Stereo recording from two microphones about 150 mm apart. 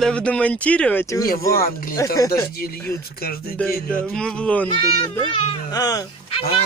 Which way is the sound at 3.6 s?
5° left (ahead or behind).